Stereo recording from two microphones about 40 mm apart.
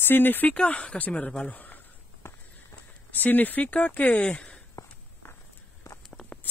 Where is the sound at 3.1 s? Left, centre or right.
Left.